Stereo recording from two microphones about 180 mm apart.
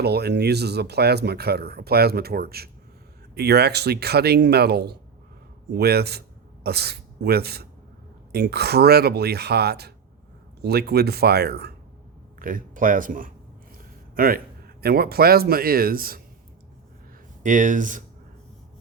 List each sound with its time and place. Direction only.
0.0 s speech: 65° right (ahead or behind)
12.4 s a man's voice: 50° right (ahead or behind)
17.4 s speech: 45° right (ahead or behind)